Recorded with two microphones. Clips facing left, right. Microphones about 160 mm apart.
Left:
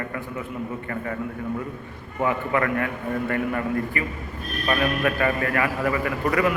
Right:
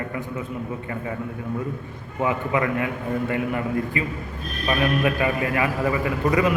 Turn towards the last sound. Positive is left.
turn(degrees=-20)  # may be behind; listen again after turning